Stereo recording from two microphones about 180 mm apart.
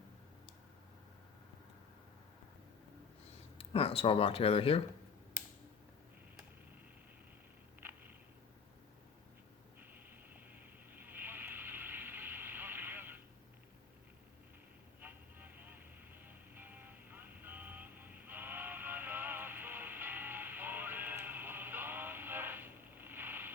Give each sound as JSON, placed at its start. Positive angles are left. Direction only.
{"t": 3.6, "sound": "speech", "side_deg": 30}
{"t": 11.0, "sound": "vehicle", "side_deg": -10}
{"t": 15.0, "sound": "vehicle", "side_deg": -10}